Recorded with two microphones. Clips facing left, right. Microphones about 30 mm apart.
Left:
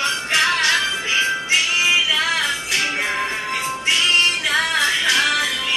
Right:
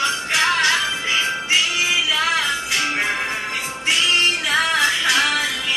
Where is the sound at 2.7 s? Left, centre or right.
Centre.